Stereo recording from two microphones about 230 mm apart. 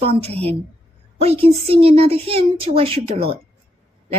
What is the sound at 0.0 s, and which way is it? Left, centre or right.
Speech, right.